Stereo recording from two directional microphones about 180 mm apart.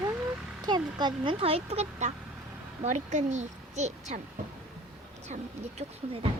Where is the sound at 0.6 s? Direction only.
25° right (ahead or behind); by 4.2 s 40° right (ahead or behind).